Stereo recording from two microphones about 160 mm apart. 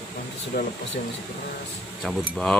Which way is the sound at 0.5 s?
75° left (ahead or behind).